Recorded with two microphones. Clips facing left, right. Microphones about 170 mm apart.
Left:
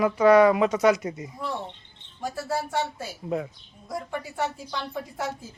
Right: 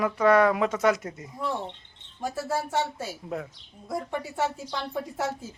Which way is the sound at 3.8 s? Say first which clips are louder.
Right 1 dB; 25° right (ahead or behind).